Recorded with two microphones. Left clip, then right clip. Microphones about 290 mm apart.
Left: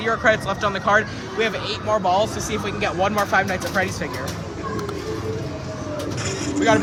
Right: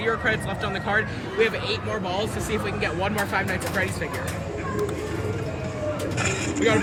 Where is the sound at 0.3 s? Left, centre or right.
Left.